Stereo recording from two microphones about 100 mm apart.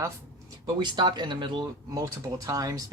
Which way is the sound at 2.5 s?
40° right (ahead or behind).